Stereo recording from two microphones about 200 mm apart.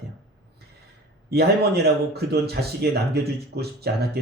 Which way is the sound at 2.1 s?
55° right (ahead or behind).